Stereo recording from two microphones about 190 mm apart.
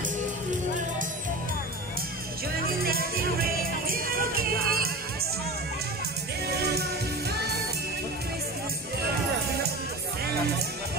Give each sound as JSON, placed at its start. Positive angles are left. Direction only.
{"t": 2.6, "sound": "music", "side_deg": -50}
{"t": 6.6, "sound": "music", "side_deg": -55}